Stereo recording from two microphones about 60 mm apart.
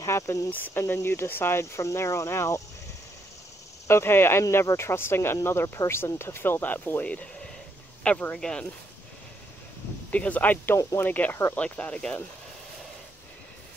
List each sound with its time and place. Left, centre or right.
0.0 s speech: left
0.7 s speech: left
3.8 s speech: left
7.0 s speech: left
10.1 s speech: left